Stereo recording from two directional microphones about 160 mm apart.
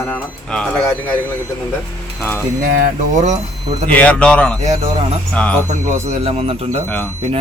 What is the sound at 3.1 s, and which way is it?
Speech, 45° right (ahead or behind).